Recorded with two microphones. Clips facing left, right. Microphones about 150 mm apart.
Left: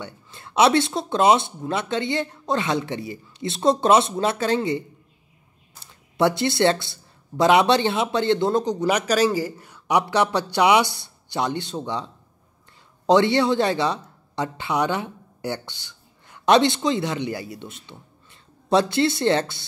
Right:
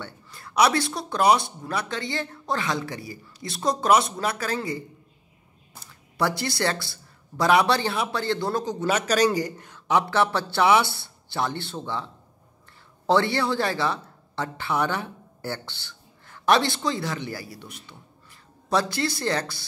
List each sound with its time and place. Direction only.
0.0 s speech: 25° left (ahead or behind)
5.9 s a man's voice: 25° left (ahead or behind)